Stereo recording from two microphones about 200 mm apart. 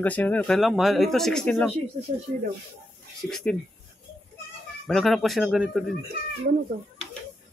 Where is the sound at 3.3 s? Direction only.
Centre (ahead or behind).